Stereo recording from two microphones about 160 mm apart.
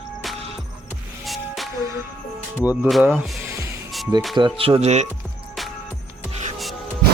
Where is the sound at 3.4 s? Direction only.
15° right (ahead or behind).